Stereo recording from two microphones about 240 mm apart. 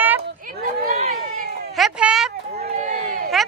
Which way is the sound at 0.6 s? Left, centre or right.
Right.